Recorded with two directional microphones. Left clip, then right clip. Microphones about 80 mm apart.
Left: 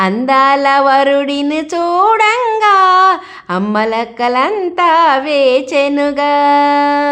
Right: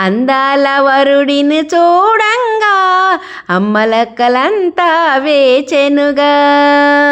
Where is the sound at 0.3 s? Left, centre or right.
Right.